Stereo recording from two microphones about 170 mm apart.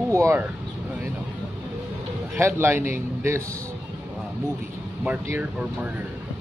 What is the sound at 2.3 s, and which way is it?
A man's voice, 15° right (ahead or behind).